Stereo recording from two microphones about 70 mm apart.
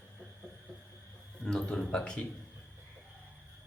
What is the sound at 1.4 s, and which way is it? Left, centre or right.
Speech, centre.